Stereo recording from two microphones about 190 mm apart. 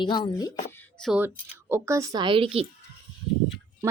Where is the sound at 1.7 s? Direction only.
15° right (ahead or behind).